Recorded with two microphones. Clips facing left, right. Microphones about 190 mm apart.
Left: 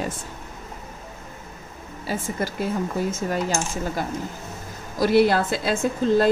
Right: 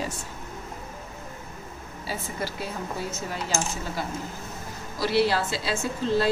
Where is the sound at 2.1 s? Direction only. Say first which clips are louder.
Left 5 dB; 45° left (ahead or behind).